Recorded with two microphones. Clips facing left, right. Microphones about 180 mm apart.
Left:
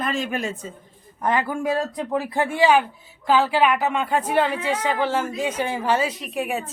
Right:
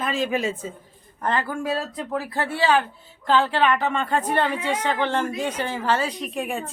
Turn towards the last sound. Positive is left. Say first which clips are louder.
# left 1 dB
turn(degrees=0)  # may be behind; listen again after turning